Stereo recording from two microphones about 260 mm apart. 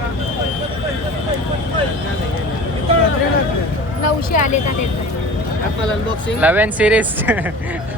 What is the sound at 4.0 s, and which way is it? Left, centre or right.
Speech, left.